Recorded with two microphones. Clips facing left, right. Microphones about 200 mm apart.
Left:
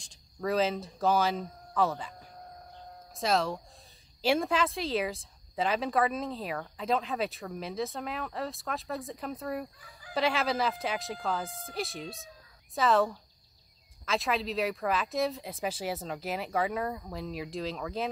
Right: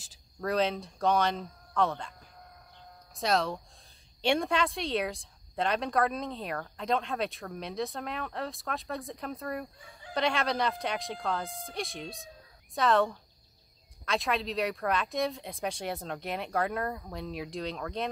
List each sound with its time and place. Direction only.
0.0 s speech: centre (ahead or behind)
3.2 s speech: centre (ahead or behind)
9.8 s fowl: 25° right (ahead or behind)
10.1 s speech: 5° left (ahead or behind)